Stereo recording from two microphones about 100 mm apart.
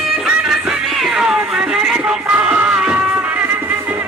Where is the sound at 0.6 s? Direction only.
5° right (ahead or behind).